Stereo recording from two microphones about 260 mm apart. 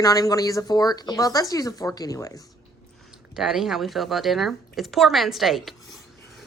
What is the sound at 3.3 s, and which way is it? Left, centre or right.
A woman's voice, centre.